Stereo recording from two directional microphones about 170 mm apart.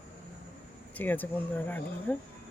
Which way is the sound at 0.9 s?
10° left (ahead or behind).